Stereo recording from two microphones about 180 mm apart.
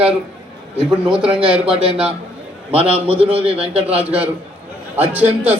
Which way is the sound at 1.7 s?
30° right (ahead or behind).